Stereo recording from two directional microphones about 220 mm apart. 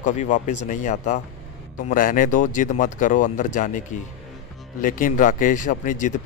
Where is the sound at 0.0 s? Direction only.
35° left (ahead or behind).